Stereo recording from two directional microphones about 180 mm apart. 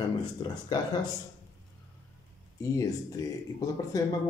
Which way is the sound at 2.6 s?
20° left (ahead or behind).